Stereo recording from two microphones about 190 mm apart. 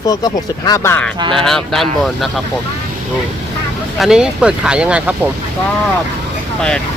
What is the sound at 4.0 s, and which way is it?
Speech, 5° right (ahead or behind).